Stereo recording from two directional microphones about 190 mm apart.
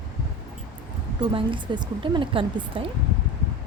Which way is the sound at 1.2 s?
25° right (ahead or behind).